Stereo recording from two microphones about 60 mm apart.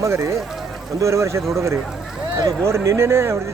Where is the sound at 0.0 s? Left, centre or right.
Right.